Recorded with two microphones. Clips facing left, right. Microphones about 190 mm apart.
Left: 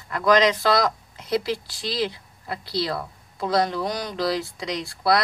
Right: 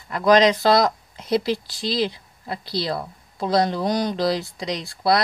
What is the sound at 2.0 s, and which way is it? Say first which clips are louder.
Speech: right 2 dB; 25° right (ahead or behind).